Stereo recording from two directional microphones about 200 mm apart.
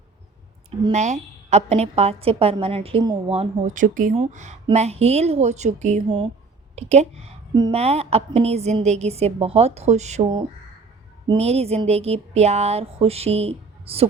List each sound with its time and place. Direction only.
0.9 s a woman's voice: 35° right (ahead or behind)
11.3 s a woman's voice: 30° right (ahead or behind)